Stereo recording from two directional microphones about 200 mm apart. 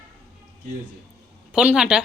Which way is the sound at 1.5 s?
5° right (ahead or behind).